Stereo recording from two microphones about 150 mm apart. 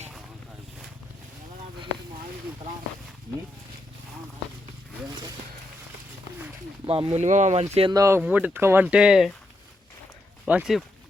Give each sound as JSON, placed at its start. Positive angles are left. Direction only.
{"t": 6.8, "sound": "speech", "side_deg": -35}
{"t": 7.9, "sound": "speech", "side_deg": -20}
{"t": 10.4, "sound": "speech", "side_deg": -5}